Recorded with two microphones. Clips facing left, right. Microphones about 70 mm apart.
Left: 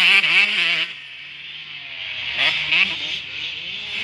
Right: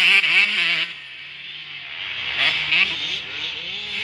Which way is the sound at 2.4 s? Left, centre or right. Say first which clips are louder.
Left 1 dB; right.